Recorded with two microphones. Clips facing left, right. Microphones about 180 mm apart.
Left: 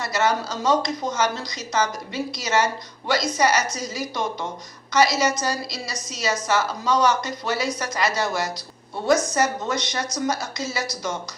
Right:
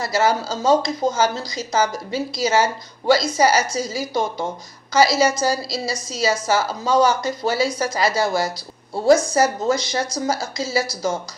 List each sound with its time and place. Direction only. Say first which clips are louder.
0.0 s speech: right 3 dB; 30° right (ahead or behind)